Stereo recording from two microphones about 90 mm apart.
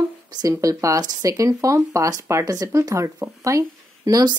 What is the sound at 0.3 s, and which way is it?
Speech, 40° right (ahead or behind).